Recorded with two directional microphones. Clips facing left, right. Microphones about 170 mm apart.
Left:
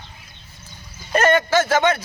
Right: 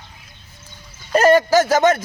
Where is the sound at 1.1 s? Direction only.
35° right (ahead or behind).